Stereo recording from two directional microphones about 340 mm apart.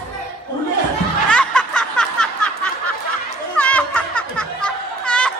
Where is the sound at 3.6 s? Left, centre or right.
Centre.